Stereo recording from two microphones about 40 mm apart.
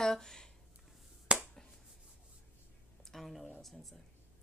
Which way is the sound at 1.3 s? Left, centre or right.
Right.